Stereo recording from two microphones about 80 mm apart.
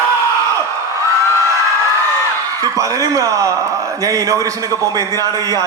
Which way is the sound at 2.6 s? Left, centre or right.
Right.